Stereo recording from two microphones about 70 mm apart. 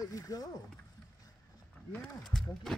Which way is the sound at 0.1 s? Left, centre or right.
Left.